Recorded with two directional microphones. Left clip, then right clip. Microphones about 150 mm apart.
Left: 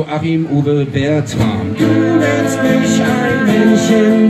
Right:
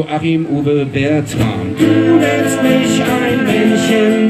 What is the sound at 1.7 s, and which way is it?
Music, 15° right (ahead or behind).